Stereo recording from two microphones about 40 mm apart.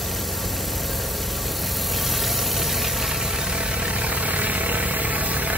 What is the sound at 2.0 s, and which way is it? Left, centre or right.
Vehicle, centre.